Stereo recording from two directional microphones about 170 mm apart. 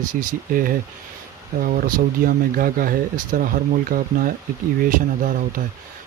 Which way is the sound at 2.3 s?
55° right (ahead or behind).